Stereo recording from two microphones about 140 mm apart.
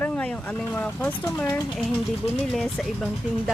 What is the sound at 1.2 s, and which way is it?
Speech, 20° left (ahead or behind).